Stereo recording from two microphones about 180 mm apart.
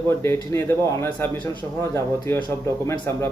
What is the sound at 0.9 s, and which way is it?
Speech, 15° left (ahead or behind).